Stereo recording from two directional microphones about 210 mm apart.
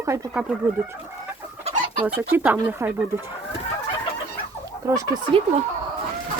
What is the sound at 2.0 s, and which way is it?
Chicken, 5° right (ahead or behind).